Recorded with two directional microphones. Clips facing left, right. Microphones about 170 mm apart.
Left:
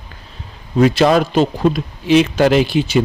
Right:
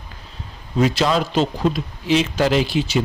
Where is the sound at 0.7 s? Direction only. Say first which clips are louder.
Left 6 dB; 60° left (ahead or behind).